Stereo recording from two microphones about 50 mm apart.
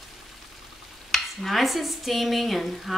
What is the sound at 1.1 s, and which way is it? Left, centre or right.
Speech, centre.